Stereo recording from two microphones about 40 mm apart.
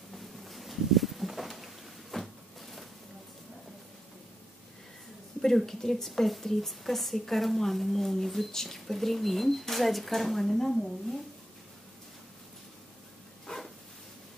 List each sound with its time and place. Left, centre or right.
0.1 s a sound: centre
5.7 s a woman's voice: centre
13.5 s dog: centre